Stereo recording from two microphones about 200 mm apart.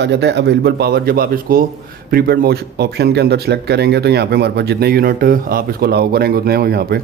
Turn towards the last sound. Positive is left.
turn(degrees=-50)  # may be behind; listen again after turning